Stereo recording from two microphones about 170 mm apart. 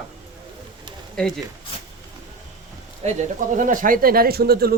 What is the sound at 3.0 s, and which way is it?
Speech, 45° right (ahead or behind).